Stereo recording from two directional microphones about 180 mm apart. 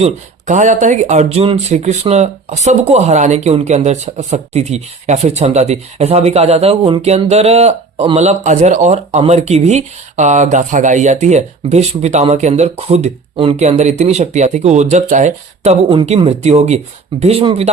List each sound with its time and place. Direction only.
0.0 s speech: 40° right (ahead or behind)